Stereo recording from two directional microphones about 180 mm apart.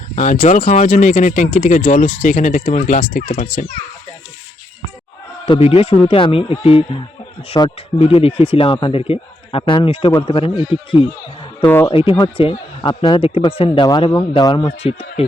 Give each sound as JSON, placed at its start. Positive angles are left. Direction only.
{"t": 0.2, "sound": "speech", "side_deg": 45}
{"t": 5.5, "sound": "speech", "side_deg": 30}
{"t": 11.6, "sound": "speech", "side_deg": 15}
{"t": 11.9, "sound": "speech", "side_deg": 30}
{"t": 14.8, "sound": "speech", "side_deg": 35}